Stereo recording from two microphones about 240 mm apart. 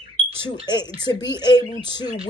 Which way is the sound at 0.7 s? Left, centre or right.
Centre.